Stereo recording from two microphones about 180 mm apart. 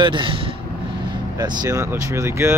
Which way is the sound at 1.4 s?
20° right (ahead or behind).